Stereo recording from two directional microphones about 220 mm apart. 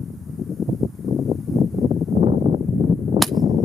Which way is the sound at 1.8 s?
15° right (ahead or behind).